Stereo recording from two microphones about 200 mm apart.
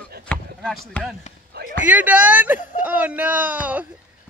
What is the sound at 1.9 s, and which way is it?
Speech, 5° right (ahead or behind).